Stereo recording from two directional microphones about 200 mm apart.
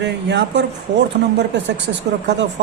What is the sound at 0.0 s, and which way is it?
Speech, 60° right (ahead or behind).